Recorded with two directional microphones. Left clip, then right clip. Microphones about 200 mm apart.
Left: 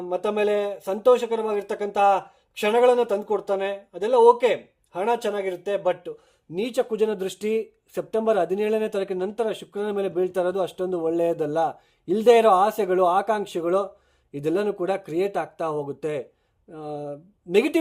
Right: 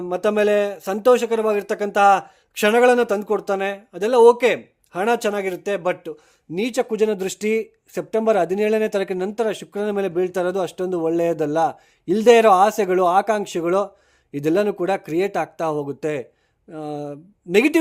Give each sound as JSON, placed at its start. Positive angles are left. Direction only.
{"t": 0.1, "sound": "speech", "side_deg": -40}